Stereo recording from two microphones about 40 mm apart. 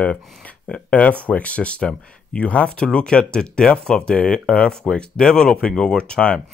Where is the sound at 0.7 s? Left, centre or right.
Left.